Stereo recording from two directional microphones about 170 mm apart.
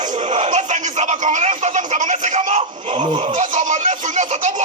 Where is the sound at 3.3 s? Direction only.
45° right (ahead or behind).